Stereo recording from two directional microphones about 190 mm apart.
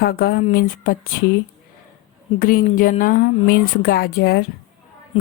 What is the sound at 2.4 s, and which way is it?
Speech, 45° left (ahead or behind).